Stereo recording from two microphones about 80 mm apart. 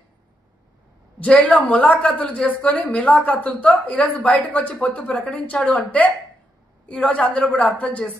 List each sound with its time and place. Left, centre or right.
1.2 s a woman's voice: centre